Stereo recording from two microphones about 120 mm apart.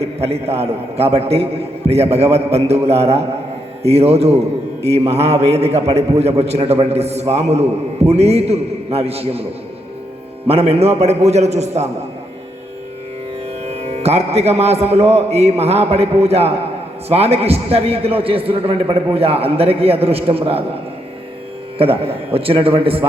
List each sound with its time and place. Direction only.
0.0 s a man's voice: 60° right (ahead or behind)
10.4 s a man's voice: 55° right (ahead or behind)
13.7 s a man's voice: 60° right (ahead or behind)
21.8 s a man's voice: 50° right (ahead or behind)